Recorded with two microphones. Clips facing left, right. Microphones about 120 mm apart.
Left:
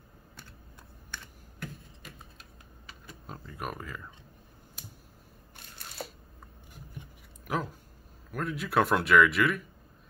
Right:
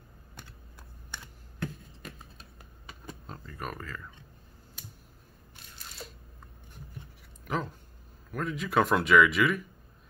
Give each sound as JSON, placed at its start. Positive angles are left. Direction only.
{"t": 3.3, "sound": "speech", "side_deg": 10}
{"t": 6.0, "sound": "camera", "side_deg": 65}
{"t": 7.4, "sound": "a sound", "side_deg": 5}
{"t": 8.3, "sound": "speech", "side_deg": 0}